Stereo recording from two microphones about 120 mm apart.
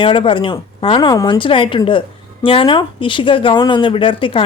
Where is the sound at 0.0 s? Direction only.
45° left (ahead or behind).